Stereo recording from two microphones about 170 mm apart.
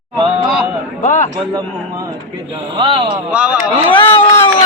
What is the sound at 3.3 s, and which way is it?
Speech, 5° right (ahead or behind).